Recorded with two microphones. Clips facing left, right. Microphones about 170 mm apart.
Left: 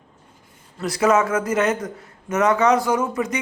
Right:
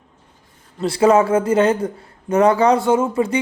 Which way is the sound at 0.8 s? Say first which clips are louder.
Right 4 dB; 30° right (ahead or behind).